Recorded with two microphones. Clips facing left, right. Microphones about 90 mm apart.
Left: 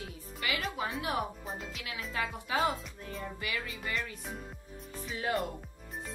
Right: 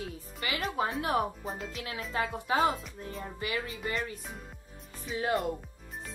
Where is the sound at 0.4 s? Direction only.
35° right (ahead or behind).